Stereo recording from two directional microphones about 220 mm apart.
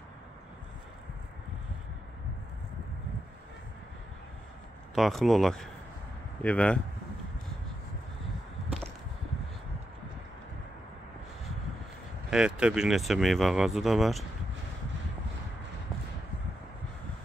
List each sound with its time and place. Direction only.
4.9 s speech: centre (ahead or behind)
12.3 s speech: 5° right (ahead or behind)